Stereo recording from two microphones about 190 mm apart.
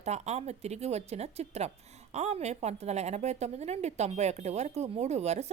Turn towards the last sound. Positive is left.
turn(degrees=-35)  # may be behind; listen again after turning